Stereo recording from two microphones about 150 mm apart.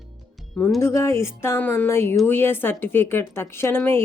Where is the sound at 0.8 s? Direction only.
20° left (ahead or behind).